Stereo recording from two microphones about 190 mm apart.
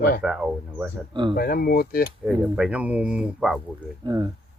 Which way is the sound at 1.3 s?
50° left (ahead or behind).